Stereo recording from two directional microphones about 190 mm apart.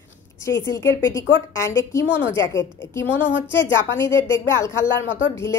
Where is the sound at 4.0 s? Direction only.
15° left (ahead or behind).